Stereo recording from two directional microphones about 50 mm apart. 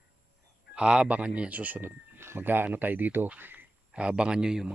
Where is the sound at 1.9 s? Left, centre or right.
Right.